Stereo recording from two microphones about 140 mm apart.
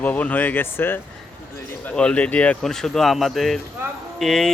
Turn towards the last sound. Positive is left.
turn(degrees=0)  # may be behind; listen again after turning